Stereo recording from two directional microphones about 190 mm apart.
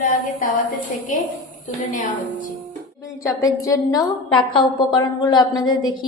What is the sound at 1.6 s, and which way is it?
Speech, 40° left (ahead or behind).